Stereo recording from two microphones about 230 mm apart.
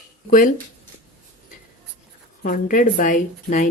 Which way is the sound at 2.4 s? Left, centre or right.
Left.